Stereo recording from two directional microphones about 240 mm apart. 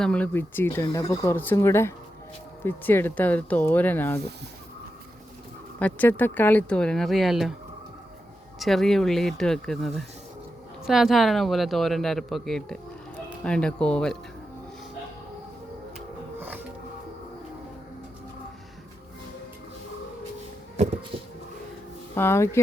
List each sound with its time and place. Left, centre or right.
0.0 s speech: centre
5.8 s speech: centre
8.5 s speech: centre
16.0 s music: centre
21.1 s a sound: right
22.1 s speech: centre